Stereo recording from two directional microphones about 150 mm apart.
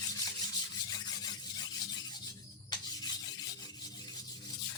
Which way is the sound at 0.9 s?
25° left (ahead or behind).